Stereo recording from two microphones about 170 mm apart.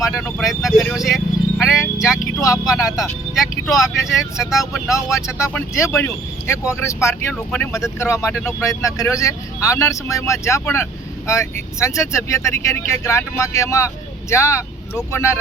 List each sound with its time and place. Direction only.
0.3 s speech: centre (ahead or behind)
1.6 s a sound: 5° right (ahead or behind)
2.7 s speech: 20° left (ahead or behind)
3.3 s speech: centre (ahead or behind)
4.9 s speech: 20° left (ahead or behind)